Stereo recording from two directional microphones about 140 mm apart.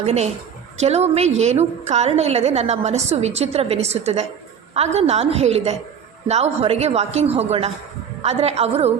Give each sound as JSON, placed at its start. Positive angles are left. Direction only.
{"t": 0.0, "sound": "a woman's voice", "side_deg": -50}